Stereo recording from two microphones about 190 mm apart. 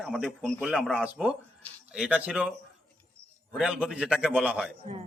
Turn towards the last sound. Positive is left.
turn(degrees=-5)  # may be behind; listen again after turning